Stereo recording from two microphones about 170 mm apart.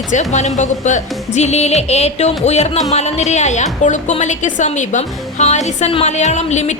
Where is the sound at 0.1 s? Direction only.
45° left (ahead or behind).